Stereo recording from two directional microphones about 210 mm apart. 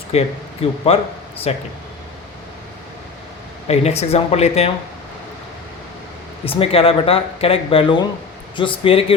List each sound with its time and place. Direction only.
0.1 s speech: 30° left (ahead or behind)
3.7 s speech: 30° left (ahead or behind)
6.4 s speech: 25° left (ahead or behind)